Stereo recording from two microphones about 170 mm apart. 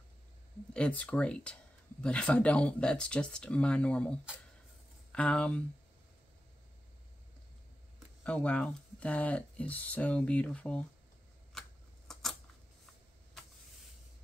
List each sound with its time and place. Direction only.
0.7 s speech: 10° left (ahead or behind)
8.2 s speech: 5° left (ahead or behind)
12.1 s a sound: centre (ahead or behind)